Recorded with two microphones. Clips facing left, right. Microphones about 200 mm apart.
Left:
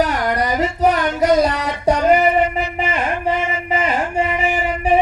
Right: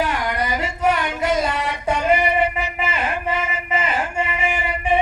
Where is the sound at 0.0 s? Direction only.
40° left (ahead or behind).